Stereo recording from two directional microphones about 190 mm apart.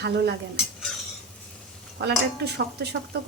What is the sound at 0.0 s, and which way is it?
Speech, 60° right (ahead or behind).